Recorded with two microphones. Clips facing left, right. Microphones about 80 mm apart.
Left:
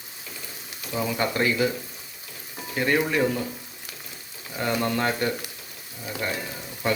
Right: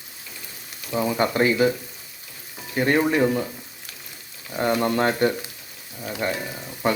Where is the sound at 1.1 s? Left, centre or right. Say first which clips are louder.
Right 4 dB; right.